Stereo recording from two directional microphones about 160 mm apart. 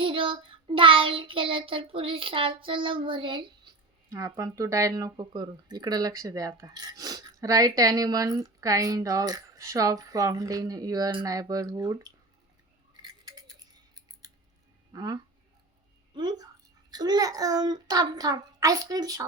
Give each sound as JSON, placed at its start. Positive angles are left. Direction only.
{"t": 0.0, "sound": "child singing", "side_deg": -30}
{"t": 4.1, "sound": "speech", "side_deg": -20}
{"t": 13.0, "sound": "scissors", "side_deg": -25}
{"t": 14.9, "sound": "speech", "side_deg": -25}